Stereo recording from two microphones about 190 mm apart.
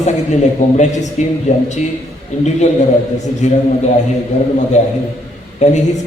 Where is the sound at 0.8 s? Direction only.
40° left (ahead or behind).